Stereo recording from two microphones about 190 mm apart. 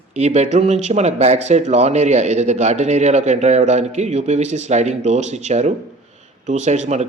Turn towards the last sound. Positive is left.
turn(degrees=-35)  # may be behind; listen again after turning